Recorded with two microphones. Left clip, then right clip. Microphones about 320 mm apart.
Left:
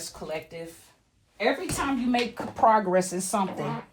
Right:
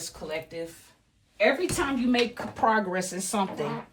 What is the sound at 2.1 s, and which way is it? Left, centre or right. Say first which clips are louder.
Speech: right 1 dB; centre.